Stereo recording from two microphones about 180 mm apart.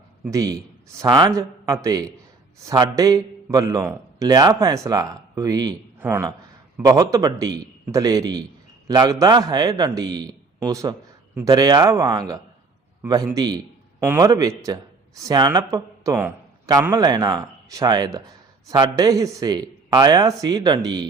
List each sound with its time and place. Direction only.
0.3 s a man's voice: 20° right (ahead or behind)